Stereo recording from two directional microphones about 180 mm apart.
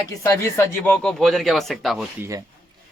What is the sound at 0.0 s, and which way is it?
Speech, 15° left (ahead or behind).